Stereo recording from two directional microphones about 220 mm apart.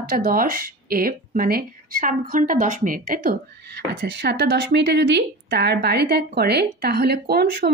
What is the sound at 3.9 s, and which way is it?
A woman's voice, 50° right (ahead or behind).